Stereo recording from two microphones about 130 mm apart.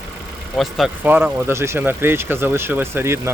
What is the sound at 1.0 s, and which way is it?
Speech, 15° right (ahead or behind).